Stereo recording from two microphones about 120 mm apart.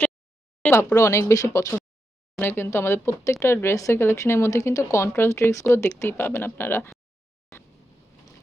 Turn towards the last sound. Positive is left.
turn(degrees=20)  # may be behind; listen again after turning